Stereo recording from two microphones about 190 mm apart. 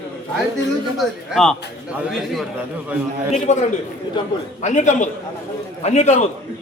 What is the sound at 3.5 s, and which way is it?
A man's voice, 35° left (ahead or behind).